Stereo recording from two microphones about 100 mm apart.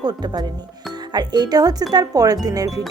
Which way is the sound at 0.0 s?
45° right (ahead or behind).